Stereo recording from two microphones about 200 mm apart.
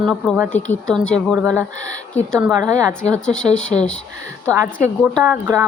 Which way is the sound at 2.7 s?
15° right (ahead or behind).